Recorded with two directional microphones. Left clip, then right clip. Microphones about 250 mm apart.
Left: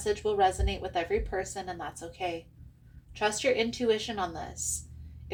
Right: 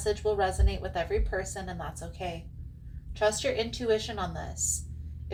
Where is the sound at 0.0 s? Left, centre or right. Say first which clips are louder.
Left 2 dB; left.